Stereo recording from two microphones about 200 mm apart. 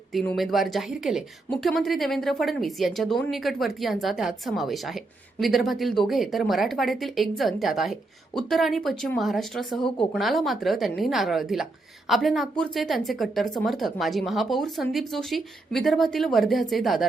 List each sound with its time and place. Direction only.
0.1 s a woman's voice: centre (ahead or behind)